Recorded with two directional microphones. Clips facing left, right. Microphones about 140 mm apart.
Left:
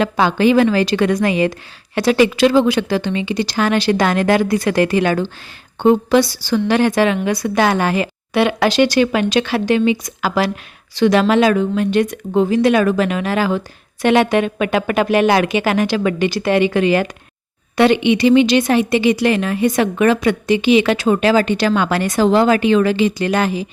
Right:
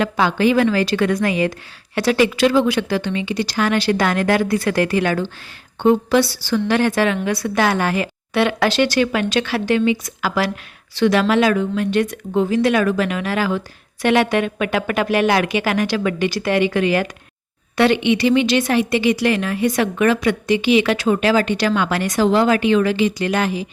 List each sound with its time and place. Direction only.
0.0 s a woman's voice: 25° left (ahead or behind)